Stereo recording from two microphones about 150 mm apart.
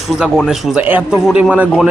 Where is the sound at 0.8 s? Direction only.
10° right (ahead or behind).